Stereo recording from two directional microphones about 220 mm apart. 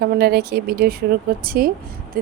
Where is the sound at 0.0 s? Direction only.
45° right (ahead or behind).